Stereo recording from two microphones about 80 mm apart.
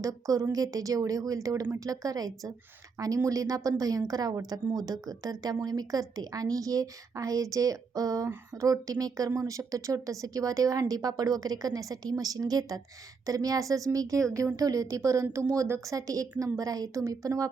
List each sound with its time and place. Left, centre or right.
0.0 s a woman's voice: right